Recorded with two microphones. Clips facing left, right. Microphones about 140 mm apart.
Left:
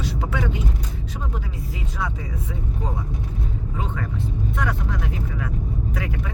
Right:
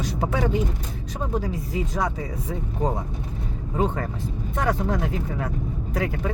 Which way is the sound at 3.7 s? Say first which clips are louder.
Right 6 dB; 40° right (ahead or behind).